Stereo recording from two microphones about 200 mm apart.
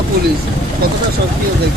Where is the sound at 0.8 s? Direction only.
50° right (ahead or behind).